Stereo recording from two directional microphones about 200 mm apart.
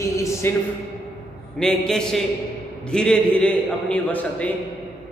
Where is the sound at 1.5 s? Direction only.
5° left (ahead or behind).